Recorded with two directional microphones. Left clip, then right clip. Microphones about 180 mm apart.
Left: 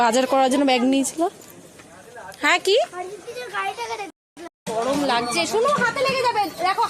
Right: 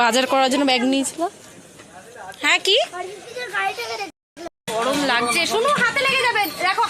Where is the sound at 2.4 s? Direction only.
20° left (ahead or behind).